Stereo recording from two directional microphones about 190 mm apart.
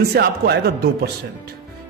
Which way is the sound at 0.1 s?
60° right (ahead or behind).